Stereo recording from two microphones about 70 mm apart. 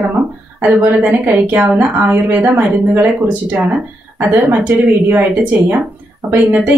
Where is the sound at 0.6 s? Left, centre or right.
Right.